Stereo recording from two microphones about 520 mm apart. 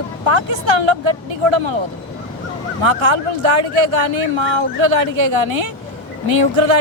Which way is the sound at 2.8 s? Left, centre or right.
Right.